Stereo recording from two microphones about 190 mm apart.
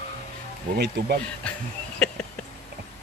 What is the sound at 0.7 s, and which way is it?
Insect, 60° right (ahead or behind).